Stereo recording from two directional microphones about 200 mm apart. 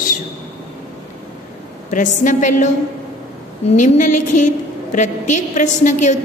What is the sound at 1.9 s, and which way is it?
Speech, 40° left (ahead or behind).